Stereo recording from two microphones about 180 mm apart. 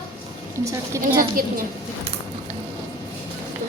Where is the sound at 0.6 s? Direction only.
15° right (ahead or behind).